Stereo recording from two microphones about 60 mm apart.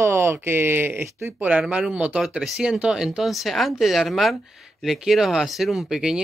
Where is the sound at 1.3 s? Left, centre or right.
Right.